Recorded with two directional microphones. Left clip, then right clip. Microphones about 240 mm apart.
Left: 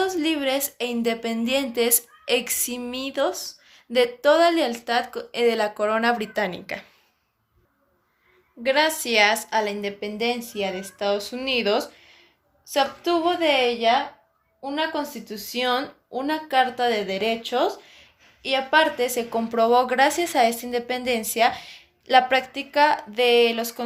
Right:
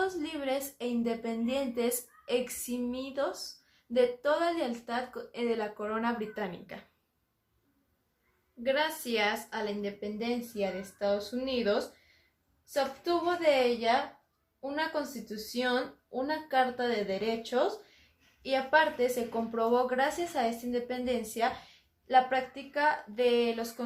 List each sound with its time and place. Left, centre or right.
0.0 s a woman's voice: left
8.6 s a woman's voice: left